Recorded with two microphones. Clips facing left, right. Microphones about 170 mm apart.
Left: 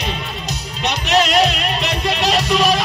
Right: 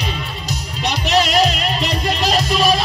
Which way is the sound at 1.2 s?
35° right (ahead or behind).